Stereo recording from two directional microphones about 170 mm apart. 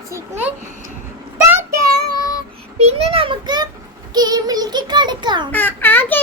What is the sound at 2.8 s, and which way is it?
A child's voice, 40° right (ahead or behind).